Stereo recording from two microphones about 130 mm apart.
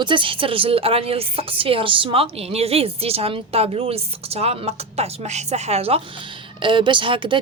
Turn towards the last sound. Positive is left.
turn(degrees=-40)  # may be behind; listen again after turning